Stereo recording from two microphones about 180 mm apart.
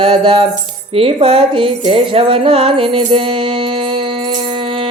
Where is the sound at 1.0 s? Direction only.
30° right (ahead or behind).